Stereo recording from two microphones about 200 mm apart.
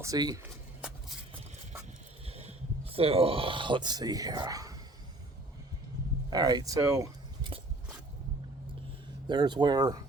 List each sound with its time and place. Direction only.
0.0 s speech: 20° right (ahead or behind)
0.8 s a sound: 5° right (ahead or behind)
2.2 s speech: 30° right (ahead or behind)
6.3 s speech: 20° right (ahead or behind)
9.2 s speech: 20° right (ahead or behind)